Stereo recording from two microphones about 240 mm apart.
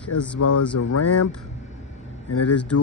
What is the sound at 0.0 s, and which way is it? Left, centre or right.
Speech, centre.